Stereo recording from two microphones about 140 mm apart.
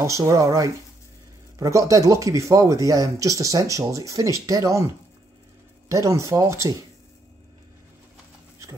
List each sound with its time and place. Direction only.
0.2 s speech: 25° right (ahead or behind)
5.9 s speech: 20° right (ahead or behind)